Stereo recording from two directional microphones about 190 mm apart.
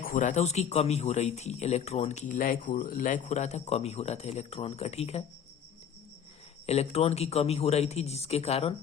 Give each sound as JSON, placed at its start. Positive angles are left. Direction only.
{"t": 0.0, "sound": "a man's voice", "side_deg": 45}
{"t": 6.7, "sound": "a man's voice", "side_deg": 35}